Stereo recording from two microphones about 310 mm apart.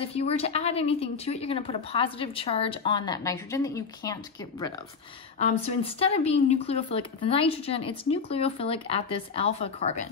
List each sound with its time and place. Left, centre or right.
0.0 s a woman's voice: centre